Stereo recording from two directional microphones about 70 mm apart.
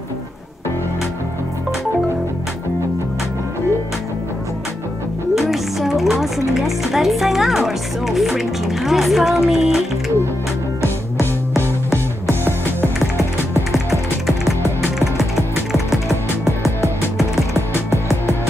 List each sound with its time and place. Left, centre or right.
5.3 s music: centre
6.5 s speech: centre
10.8 s music: left
17.8 s music: left